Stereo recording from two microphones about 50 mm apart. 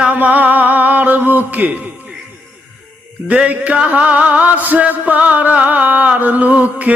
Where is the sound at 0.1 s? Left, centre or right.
Right.